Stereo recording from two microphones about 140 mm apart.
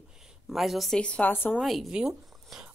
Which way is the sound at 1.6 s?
Centre (ahead or behind).